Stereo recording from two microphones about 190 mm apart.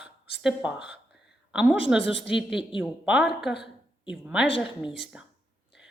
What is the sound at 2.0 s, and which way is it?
Speech, 70° left (ahead or behind).